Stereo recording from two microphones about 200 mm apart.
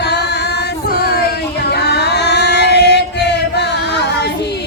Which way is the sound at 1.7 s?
55° left (ahead or behind).